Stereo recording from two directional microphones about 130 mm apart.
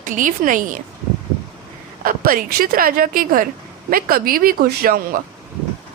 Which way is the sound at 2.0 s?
90° right.